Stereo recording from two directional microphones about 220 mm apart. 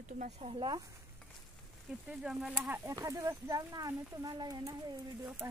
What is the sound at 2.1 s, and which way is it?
Speech, 5° right (ahead or behind).